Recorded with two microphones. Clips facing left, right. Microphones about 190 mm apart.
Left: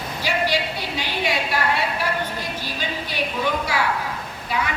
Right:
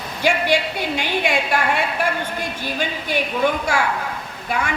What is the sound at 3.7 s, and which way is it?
Speech, 50° right (ahead or behind).